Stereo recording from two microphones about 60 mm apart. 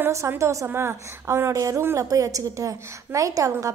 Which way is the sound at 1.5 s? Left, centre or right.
Right.